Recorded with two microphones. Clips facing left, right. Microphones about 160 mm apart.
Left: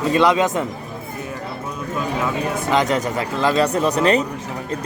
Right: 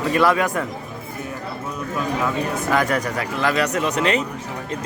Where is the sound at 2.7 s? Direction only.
20° left (ahead or behind).